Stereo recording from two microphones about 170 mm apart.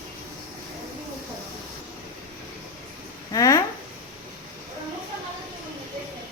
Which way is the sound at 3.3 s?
20° left (ahead or behind).